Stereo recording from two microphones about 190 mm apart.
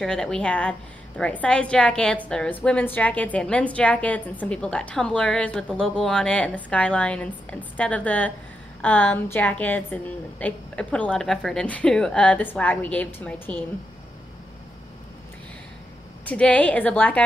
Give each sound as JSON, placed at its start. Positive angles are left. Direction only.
{"t": 0.0, "sound": "a woman's voice", "side_deg": 5}
{"t": 16.3, "sound": "a woman's voice", "side_deg": 5}